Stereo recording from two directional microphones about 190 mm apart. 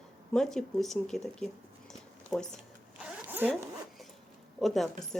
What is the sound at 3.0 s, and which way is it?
Zipper, 5° right (ahead or behind).